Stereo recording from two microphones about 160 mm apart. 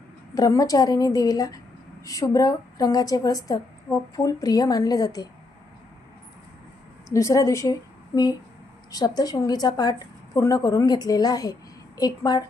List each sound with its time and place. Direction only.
0.3 s a woman's voice: 25° left (ahead or behind)
7.1 s a woman's voice: 20° left (ahead or behind)